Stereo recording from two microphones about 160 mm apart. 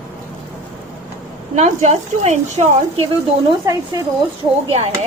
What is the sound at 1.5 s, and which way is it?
Speech, 45° right (ahead or behind).